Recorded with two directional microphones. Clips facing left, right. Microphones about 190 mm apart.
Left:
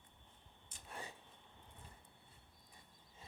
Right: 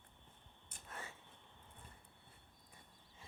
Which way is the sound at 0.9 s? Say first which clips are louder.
Left 1 dB; 15° left (ahead or behind).